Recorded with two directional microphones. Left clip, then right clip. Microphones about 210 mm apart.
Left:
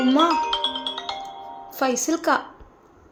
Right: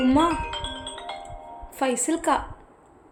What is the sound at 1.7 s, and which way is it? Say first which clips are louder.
Speech: left 2 dB; 5° left (ahead or behind).